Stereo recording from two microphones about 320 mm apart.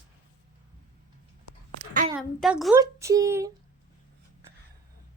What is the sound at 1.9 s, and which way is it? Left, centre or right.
Speech, right.